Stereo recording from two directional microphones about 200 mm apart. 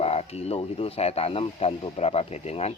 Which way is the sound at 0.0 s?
30° left (ahead or behind).